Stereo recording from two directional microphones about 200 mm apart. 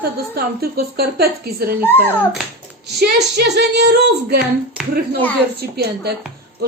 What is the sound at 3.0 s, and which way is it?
A woman's voice, 55° right (ahead or behind).